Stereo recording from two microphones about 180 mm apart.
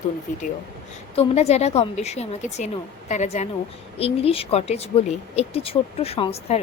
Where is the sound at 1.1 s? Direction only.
35° left (ahead or behind).